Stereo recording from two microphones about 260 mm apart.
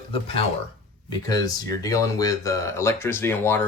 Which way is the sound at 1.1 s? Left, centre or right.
Centre.